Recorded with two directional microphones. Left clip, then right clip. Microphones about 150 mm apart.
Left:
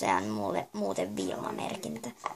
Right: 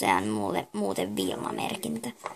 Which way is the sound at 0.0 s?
25° right (ahead or behind).